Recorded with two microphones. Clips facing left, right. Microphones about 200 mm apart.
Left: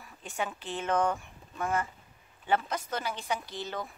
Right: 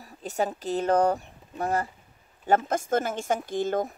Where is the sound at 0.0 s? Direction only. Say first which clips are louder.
Right 7 dB; 35° right (ahead or behind).